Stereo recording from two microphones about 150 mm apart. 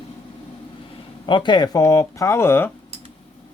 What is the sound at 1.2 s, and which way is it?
Speech, 30° left (ahead or behind).